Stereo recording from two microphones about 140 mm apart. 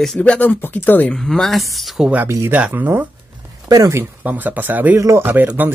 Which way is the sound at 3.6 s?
25° right (ahead or behind).